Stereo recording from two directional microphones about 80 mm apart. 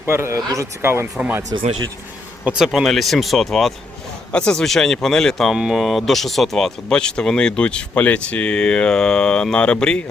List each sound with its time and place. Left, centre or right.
0.0 s speech: right
0.3 s speech: right
0.8 s speech: right
2.6 s speech: centre